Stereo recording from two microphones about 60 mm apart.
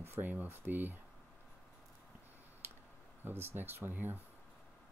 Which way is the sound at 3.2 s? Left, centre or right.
Right.